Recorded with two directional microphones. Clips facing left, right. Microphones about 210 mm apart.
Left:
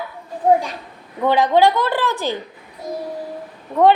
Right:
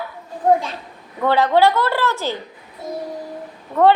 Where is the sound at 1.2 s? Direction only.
15° left (ahead or behind).